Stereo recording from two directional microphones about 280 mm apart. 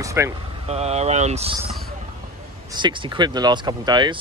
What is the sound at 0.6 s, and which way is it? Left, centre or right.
Speech, right.